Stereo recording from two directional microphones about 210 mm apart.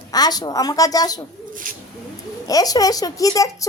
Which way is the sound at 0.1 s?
20° left (ahead or behind).